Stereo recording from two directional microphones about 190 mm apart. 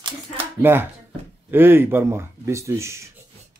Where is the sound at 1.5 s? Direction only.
10° right (ahead or behind).